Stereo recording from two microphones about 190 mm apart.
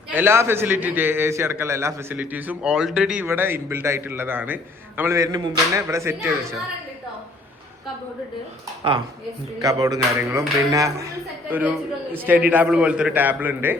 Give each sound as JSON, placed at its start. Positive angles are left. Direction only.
{"t": 0.1, "sound": "a man's voice", "side_deg": -10}
{"t": 9.6, "sound": "a man's voice", "side_deg": -20}
{"t": 12.1, "sound": "a man's voice", "side_deg": -10}